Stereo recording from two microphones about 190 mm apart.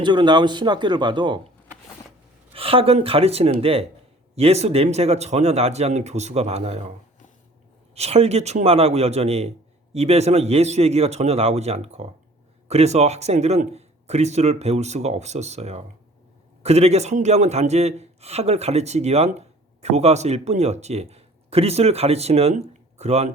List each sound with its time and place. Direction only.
0.0 s a man's voice: 25° right (ahead or behind)
2.5 s a man's voice: 30° right (ahead or behind)
7.9 s a man's voice: 35° right (ahead or behind)